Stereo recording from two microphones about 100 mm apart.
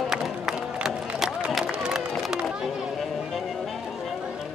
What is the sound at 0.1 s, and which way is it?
Music, 5° right (ahead or behind).